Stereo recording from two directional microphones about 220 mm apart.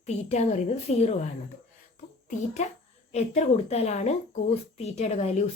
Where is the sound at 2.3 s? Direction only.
30° left (ahead or behind).